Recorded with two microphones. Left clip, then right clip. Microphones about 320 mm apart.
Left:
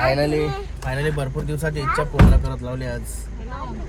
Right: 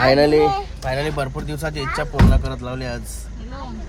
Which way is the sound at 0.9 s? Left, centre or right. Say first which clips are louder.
Right 2 dB; centre.